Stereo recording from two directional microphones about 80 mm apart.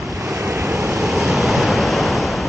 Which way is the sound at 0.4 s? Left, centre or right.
Right.